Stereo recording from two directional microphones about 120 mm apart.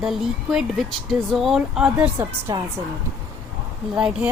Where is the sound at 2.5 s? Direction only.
25° right (ahead or behind).